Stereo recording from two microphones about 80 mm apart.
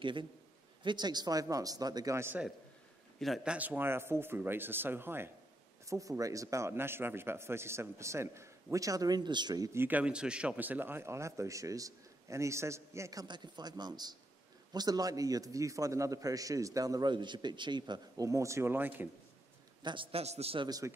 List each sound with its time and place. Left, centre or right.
0.0 s a man's voice: right
0.8 s a man's voice: right
3.4 s speech: centre
5.9 s speech: right
9.8 s speech: right
13.3 s a man's voice: right
17.1 s speech: right
18.2 s speech: right
19.8 s a man's voice: right
20.8 s speech: right